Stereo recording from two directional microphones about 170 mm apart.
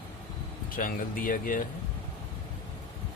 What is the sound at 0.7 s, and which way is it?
Speech, 55° left (ahead or behind).